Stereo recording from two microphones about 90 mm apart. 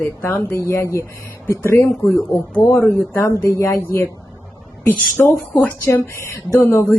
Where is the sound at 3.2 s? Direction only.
30° left (ahead or behind).